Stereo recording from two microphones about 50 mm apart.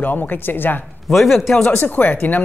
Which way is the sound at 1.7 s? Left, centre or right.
Left.